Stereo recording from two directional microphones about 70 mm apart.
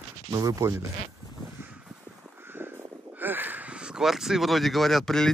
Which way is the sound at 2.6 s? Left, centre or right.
Right.